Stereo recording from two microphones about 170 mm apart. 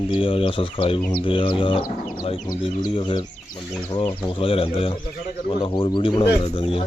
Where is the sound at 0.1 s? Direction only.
30° left (ahead or behind).